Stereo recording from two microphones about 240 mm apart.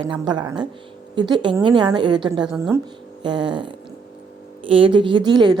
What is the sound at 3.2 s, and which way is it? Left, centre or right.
Speech, centre.